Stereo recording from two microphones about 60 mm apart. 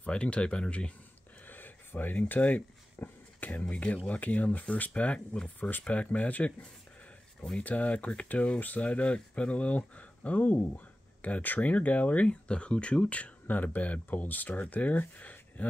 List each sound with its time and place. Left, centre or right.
0.0 s speech: centre
1.5 s a sound: left
3.0 s speech: left